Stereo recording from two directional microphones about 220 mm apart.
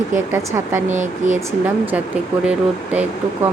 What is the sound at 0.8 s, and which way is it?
Speech, 35° right (ahead or behind).